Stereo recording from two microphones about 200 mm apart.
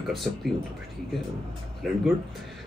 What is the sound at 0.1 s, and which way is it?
Speech, centre (ahead or behind).